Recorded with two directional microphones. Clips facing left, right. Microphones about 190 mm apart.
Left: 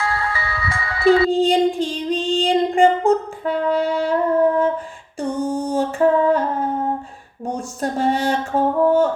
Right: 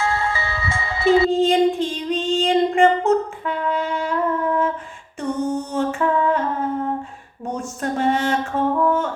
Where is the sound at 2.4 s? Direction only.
35° left (ahead or behind).